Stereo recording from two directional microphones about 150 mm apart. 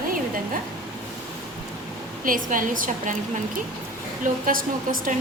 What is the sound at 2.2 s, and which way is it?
Speech, 65° right (ahead or behind).